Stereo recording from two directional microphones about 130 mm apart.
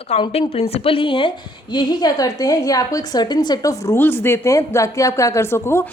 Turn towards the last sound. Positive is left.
turn(degrees=20)  # may be behind; listen again after turning